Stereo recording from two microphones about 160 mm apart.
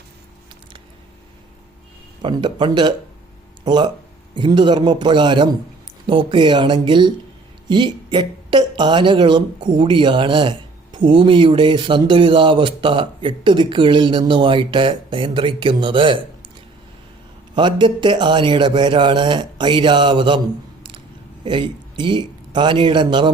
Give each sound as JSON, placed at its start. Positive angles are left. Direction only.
{"t": 2.2, "sound": "a man's voice", "side_deg": -30}
{"t": 17.5, "sound": "a man's voice", "side_deg": -30}
{"t": 21.4, "sound": "speech", "side_deg": -30}